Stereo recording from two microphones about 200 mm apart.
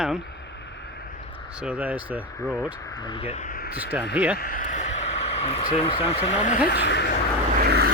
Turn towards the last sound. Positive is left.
turn(degrees=-55)  # may be behind; listen again after turning